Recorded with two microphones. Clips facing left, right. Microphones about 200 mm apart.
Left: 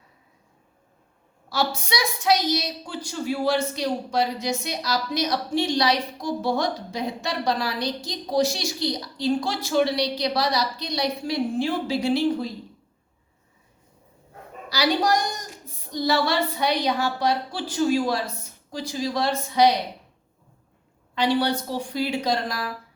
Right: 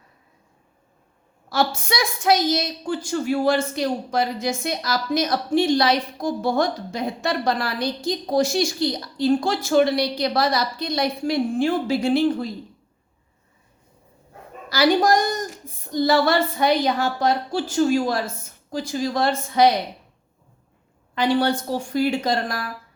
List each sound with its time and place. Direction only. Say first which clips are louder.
1.5 s a woman's voice: right 3 dB; 50° right (ahead or behind)
14.7 s a woman's voice: right 4 dB; 50° right (ahead or behind)
21.2 s a woman's voice: right 2 dB; 50° right (ahead or behind)